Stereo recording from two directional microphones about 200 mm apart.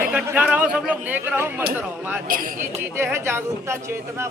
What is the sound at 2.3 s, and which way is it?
Speech, 45° right (ahead or behind).